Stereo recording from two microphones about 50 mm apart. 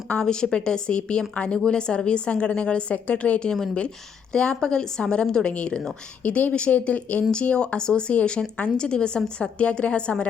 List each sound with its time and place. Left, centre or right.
0.1 s speech: centre